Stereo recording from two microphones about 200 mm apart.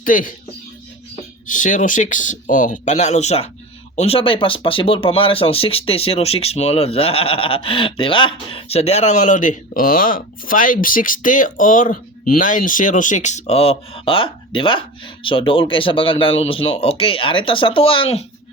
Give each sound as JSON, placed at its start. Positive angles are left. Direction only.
{"t": 0.0, "sound": "speech", "side_deg": 45}
{"t": 1.5, "sound": "speech", "side_deg": 40}